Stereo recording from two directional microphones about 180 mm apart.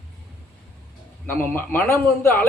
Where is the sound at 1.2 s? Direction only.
10° left (ahead or behind).